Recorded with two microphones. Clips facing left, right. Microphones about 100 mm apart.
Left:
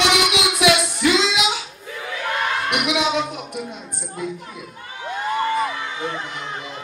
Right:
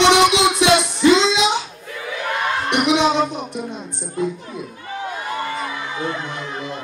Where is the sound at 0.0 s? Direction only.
30° right (ahead or behind).